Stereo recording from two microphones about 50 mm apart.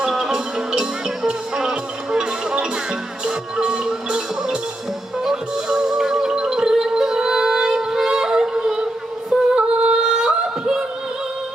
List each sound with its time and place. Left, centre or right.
0.0 s music: centre
9.3 s singing: centre